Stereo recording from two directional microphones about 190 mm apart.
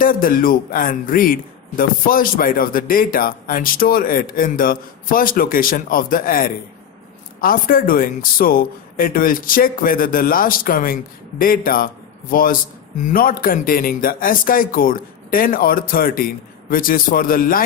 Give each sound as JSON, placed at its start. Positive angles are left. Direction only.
{"t": 0.0, "sound": "a man's voice", "side_deg": 45}